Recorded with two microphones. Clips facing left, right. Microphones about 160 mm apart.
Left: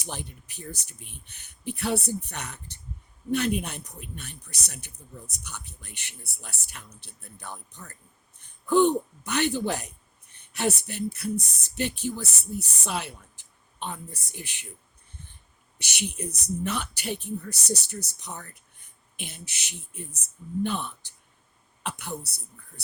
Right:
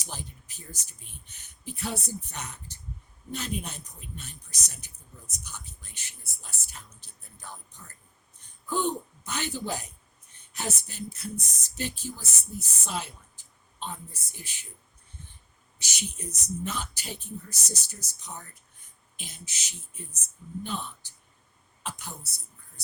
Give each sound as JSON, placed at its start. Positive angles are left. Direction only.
{"t": 0.0, "sound": "speech", "side_deg": 65}
{"t": 15.8, "sound": "a woman's voice", "side_deg": 65}